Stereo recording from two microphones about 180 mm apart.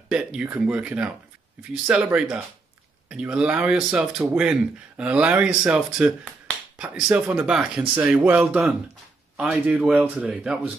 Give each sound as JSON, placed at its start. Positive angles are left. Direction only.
{"t": 0.1, "sound": "speech", "side_deg": -5}